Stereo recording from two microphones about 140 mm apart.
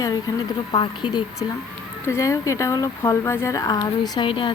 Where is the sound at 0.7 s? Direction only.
30° left (ahead or behind).